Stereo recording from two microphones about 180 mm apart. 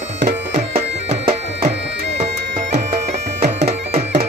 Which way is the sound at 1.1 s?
35° right (ahead or behind).